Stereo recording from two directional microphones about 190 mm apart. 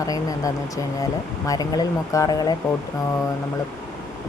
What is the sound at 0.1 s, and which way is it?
Speech, 20° left (ahead or behind).